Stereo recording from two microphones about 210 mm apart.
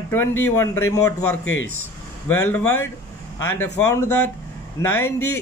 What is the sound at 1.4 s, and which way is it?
Speech, 70° left (ahead or behind).